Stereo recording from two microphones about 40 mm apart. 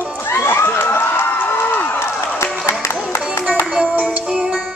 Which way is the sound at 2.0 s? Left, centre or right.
Left.